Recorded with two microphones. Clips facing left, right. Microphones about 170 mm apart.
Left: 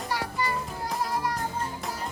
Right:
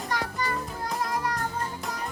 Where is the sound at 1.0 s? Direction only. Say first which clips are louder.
Even; 5° left (ahead or behind).